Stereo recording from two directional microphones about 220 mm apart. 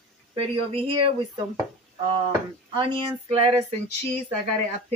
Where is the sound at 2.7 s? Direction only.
25° right (ahead or behind).